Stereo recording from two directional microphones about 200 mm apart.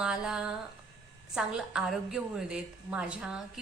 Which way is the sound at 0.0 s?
5° right (ahead or behind).